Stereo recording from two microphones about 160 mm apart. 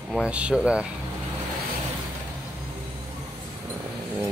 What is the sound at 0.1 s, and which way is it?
Speech, 5° right (ahead or behind).